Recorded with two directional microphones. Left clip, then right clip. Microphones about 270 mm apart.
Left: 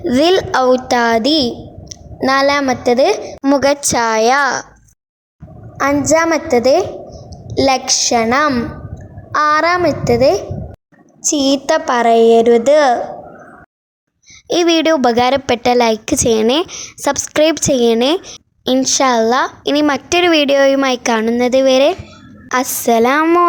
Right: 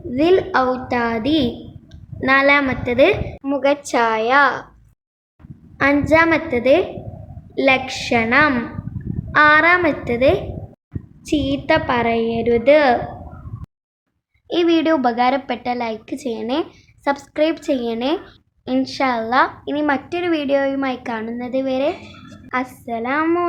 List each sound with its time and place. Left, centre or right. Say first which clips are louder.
0.1 s a woman's voice: left 3 dB; left
5.7 s a woman's voice: left 2 dB; centre
11.3 s a woman's voice: left 4 dB; left
14.4 s a woman's voice: left 4 dB; left
19.6 s a woman's voice: left 6 dB; left